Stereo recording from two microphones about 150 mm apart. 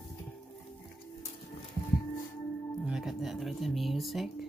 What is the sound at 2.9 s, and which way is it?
Music, 5° right (ahead or behind).